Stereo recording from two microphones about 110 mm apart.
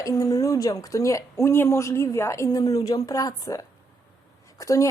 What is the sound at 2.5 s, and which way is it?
A woman's voice, 35° left (ahead or behind).